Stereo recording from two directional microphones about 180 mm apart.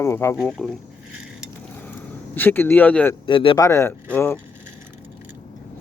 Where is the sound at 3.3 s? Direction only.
25° left (ahead or behind); by 4.4 s 10° left (ahead or behind).